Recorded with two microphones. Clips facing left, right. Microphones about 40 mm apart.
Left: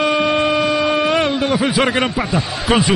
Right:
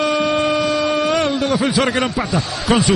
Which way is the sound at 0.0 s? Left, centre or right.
Centre.